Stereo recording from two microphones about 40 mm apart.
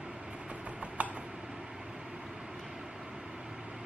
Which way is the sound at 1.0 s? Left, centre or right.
Right.